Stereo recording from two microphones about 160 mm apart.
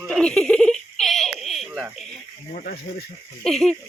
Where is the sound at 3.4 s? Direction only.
5° left (ahead or behind).